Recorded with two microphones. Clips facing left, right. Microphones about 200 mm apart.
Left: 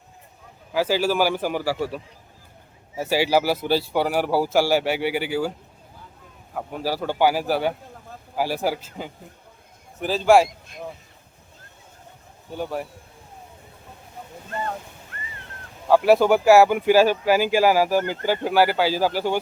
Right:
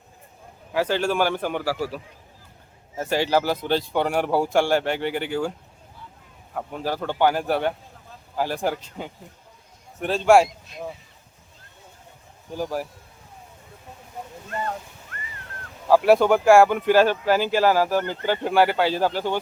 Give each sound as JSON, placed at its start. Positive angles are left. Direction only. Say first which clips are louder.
{"t": 0.7, "sound": "a man's voice", "louder": "left 1 dB", "side_deg": 5}
{"t": 6.5, "sound": "a man's voice", "louder": "left 1 dB", "side_deg": 5}
{"t": 12.5, "sound": "a man's voice", "louder": "right 1 dB", "side_deg": 0}
{"t": 15.9, "sound": "a man's voice", "louder": "even", "side_deg": 0}